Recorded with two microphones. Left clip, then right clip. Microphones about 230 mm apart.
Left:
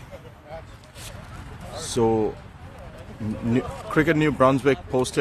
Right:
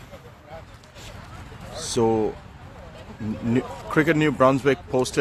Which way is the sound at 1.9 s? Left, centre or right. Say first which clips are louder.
Even; centre.